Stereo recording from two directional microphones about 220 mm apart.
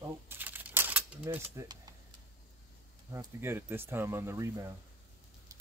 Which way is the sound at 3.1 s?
10° right (ahead or behind).